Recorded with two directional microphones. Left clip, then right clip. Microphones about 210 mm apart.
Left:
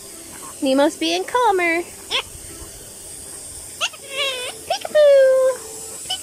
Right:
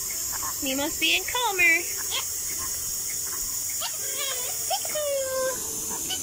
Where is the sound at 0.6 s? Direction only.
40° left (ahead or behind).